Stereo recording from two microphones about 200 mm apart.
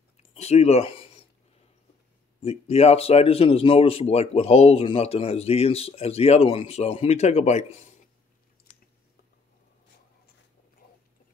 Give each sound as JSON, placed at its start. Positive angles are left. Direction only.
{"t": 0.3, "sound": "speech", "side_deg": 30}
{"t": 2.4, "sound": "speech", "side_deg": 30}